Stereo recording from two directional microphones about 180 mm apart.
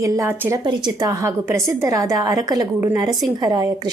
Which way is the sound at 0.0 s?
15° right (ahead or behind).